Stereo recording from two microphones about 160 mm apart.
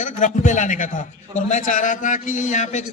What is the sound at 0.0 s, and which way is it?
A man's voice, 50° left (ahead or behind).